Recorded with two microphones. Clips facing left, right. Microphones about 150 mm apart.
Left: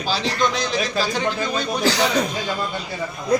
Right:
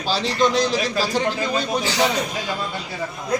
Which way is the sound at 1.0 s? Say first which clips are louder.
Right 1 dB; 35° right (ahead or behind).